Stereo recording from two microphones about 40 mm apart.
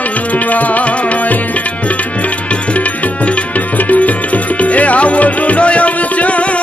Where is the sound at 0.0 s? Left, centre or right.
Left.